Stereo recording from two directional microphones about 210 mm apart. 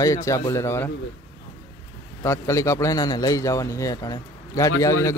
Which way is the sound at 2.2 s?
15° left (ahead or behind).